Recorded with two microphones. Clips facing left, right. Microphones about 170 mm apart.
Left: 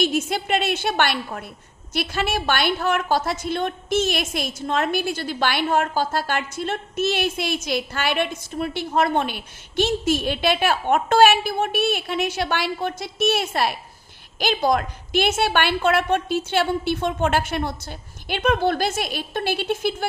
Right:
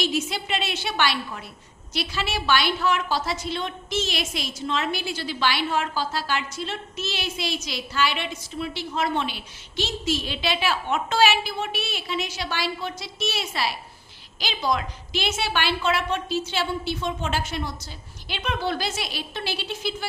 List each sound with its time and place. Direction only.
0.0 s a woman's voice: 50° left (ahead or behind)